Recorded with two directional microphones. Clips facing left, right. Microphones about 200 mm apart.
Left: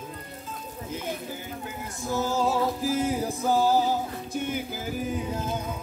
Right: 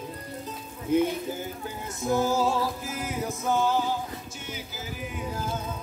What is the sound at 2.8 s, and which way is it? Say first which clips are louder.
Music: left 7 dB; 30° left (ahead or behind).